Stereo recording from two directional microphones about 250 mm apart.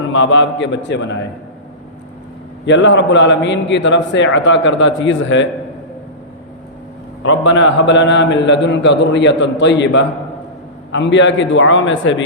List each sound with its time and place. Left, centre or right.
0.0 s a man's voice: left
2.6 s a man's voice: left
7.3 s a man's voice: left